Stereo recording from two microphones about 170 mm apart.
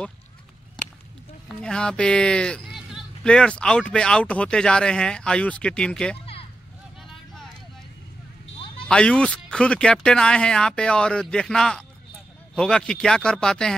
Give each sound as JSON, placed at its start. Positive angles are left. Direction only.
{"t": 1.5, "sound": "speech", "side_deg": 5}
{"t": 8.5, "sound": "a sound", "side_deg": 30}
{"t": 8.8, "sound": "speech", "side_deg": 5}